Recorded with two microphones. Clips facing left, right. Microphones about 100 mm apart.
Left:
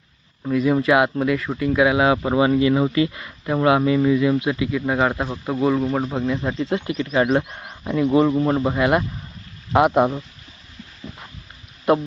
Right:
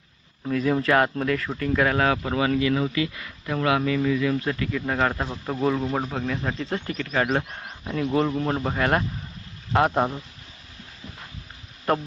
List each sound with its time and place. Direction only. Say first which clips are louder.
0.4 s speech: left 4 dB; 5° left (ahead or behind)
2.1 s speech: left 6 dB; 25° left (ahead or behind)